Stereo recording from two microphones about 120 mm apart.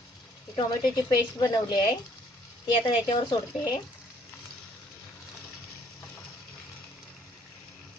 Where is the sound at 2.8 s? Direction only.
40° left (ahead or behind).